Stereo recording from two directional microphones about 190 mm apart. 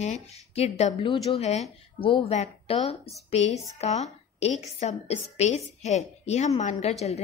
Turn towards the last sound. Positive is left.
turn(degrees=35)  # may be behind; listen again after turning